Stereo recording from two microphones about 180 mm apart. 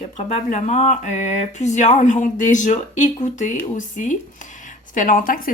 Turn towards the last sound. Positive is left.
turn(degrees=50)  # may be behind; listen again after turning